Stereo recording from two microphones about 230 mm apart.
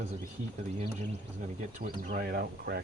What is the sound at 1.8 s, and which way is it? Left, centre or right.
Speech, right.